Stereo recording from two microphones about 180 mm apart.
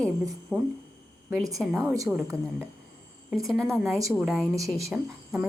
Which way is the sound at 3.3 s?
Centre (ahead or behind).